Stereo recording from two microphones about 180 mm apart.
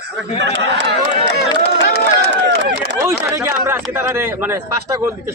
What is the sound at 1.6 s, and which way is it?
Crowd, 60° left (ahead or behind).